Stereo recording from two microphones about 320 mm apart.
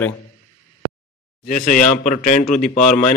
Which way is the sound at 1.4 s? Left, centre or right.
Left.